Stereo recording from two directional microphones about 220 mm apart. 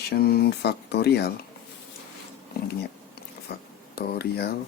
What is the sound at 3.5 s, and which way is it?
Speech, 45° left (ahead or behind).